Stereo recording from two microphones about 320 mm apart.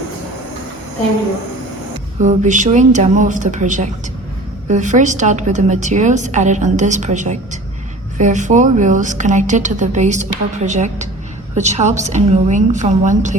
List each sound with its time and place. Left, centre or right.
2.2 s a woman's voice: right